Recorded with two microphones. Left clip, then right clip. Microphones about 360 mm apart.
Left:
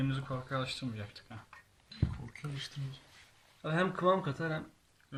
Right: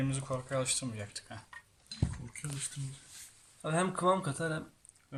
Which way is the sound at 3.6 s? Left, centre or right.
Centre.